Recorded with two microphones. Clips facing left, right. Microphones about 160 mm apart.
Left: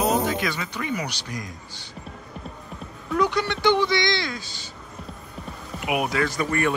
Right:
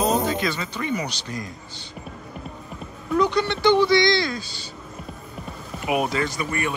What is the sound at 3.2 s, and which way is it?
Speech, 20° right (ahead or behind).